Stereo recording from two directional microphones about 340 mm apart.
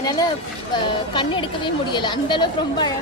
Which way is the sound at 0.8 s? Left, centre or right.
Centre.